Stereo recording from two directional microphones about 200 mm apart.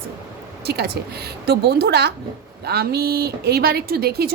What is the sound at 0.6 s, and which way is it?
A woman's voice, 55° right (ahead or behind).